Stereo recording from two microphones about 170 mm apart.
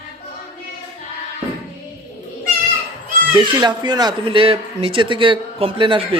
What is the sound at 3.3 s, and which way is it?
Speech, 25° right (ahead or behind).